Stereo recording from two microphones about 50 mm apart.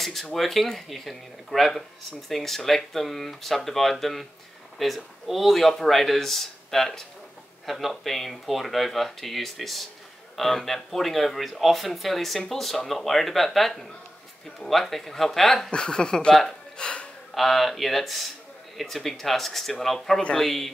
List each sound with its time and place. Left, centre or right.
0.0 s speech: centre
15.7 s speech: centre
16.7 s gasp: centre
17.3 s speech: centre